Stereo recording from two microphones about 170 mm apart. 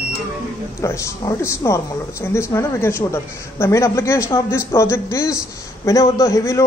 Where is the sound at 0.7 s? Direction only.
15° left (ahead or behind).